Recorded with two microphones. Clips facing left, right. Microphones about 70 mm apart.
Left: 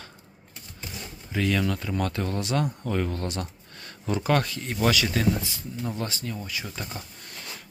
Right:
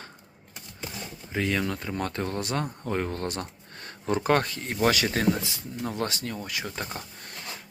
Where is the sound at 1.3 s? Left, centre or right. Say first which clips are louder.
Left 2 dB; right.